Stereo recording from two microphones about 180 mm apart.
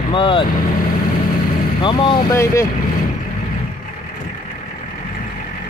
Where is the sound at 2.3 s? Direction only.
15° left (ahead or behind).